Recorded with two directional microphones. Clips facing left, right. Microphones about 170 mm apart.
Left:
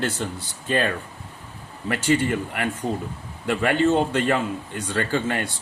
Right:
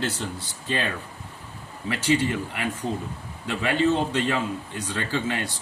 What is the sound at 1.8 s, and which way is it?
A man's voice, 50° left (ahead or behind).